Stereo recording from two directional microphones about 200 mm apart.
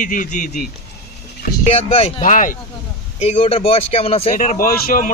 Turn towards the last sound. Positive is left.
turn(degrees=45)  # may be behind; listen again after turning